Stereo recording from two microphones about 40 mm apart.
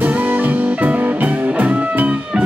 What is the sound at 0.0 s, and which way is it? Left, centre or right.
Music, right.